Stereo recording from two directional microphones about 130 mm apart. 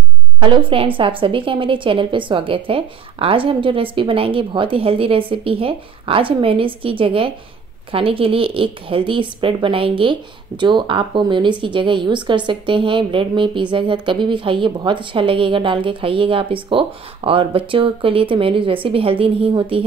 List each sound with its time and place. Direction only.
0.4 s a woman's voice: 40° right (ahead or behind)